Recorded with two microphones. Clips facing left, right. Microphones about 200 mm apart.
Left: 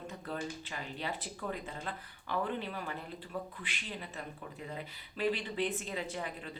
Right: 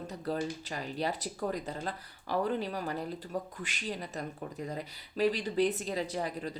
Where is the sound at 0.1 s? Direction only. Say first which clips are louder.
Right 7 dB; 35° right (ahead or behind).